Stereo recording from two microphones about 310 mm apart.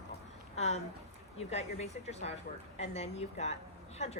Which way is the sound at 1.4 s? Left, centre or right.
Left.